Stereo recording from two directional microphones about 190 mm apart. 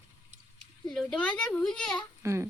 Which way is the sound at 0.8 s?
5° left (ahead or behind).